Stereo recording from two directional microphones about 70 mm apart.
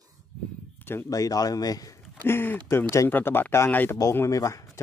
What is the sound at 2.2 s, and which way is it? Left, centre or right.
Speech, left.